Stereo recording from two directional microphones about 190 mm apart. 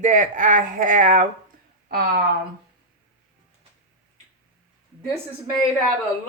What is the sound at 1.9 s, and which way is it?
Speech, 55° right (ahead or behind).